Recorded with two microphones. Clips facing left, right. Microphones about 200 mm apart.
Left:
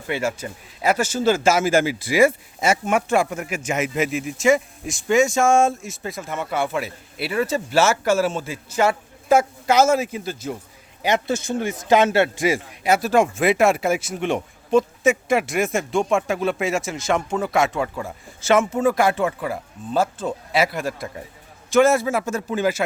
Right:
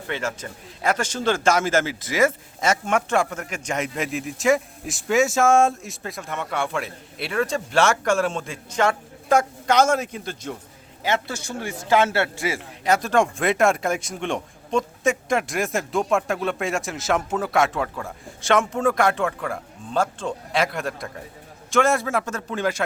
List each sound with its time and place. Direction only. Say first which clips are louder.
0.1 s a man's voice: left 4 dB; 10° left (ahead or behind)
11.0 s a man's voice: left 4 dB; 20° left (ahead or behind)